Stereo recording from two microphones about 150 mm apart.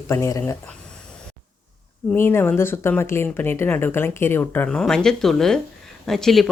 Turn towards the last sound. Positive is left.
turn(degrees=0)  # may be behind; listen again after turning